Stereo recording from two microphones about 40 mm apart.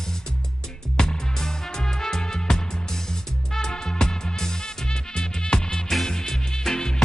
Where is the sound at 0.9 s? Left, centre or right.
Centre.